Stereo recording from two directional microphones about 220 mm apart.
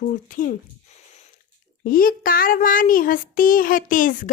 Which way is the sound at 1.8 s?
40° left (ahead or behind).